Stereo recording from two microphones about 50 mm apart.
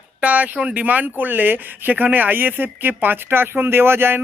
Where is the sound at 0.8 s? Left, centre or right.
Right.